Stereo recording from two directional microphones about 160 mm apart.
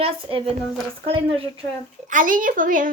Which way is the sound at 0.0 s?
35° right (ahead or behind).